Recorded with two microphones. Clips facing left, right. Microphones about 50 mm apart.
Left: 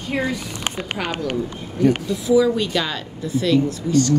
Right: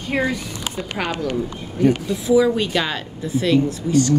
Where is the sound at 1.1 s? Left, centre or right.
Left.